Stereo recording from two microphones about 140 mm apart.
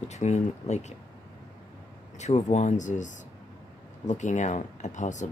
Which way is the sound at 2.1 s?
55° left (ahead or behind).